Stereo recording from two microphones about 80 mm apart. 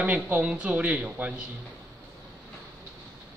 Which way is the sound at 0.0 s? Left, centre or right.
Centre.